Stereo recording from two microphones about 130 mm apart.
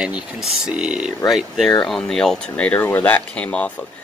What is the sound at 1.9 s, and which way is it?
Speech, 5° left (ahead or behind).